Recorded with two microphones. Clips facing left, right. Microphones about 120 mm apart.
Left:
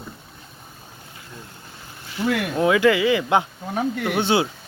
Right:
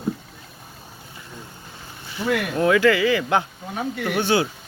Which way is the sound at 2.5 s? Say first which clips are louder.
Even; 15° left (ahead or behind).